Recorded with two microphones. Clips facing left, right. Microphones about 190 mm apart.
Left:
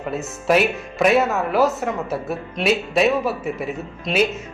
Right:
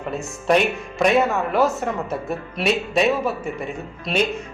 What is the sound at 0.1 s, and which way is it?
Speech, 5° left (ahead or behind).